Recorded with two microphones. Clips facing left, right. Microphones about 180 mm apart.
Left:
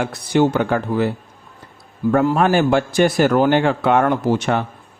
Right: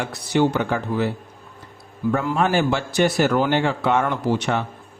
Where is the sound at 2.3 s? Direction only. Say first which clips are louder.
Left 4 dB; 55° left (ahead or behind).